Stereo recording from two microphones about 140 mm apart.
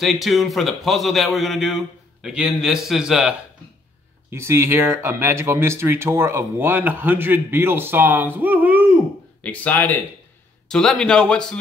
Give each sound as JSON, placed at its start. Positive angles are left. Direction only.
{"t": 0.0, "sound": "a man's voice", "side_deg": 0}
{"t": 4.3, "sound": "speech", "side_deg": -20}
{"t": 9.4, "sound": "a man's voice", "side_deg": 10}